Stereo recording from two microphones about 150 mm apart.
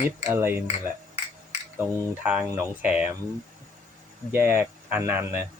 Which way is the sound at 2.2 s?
5° right (ahead or behind).